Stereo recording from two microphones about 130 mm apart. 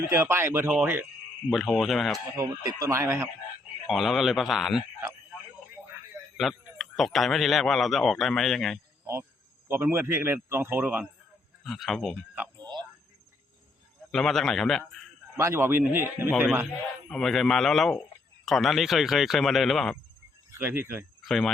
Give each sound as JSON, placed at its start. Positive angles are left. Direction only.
{"t": 0.0, "sound": "a man's voice", "side_deg": -20}
{"t": 1.5, "sound": "a man's voice", "side_deg": 0}
{"t": 2.3, "sound": "speech", "side_deg": -25}
{"t": 3.8, "sound": "a man's voice", "side_deg": 0}
{"t": 6.3, "sound": "a man's voice", "side_deg": 0}
{"t": 9.6, "sound": "a man's voice", "side_deg": -20}
{"t": 11.6, "sound": "a man's voice", "side_deg": 0}
{"t": 12.5, "sound": "a sound", "side_deg": -35}
{"t": 14.1, "sound": "a man's voice", "side_deg": 5}
{"t": 15.4, "sound": "a man's voice", "side_deg": -20}
{"t": 17.1, "sound": "a man's voice", "side_deg": 5}
{"t": 20.5, "sound": "speech", "side_deg": -15}
{"t": 21.2, "sound": "speech", "side_deg": 5}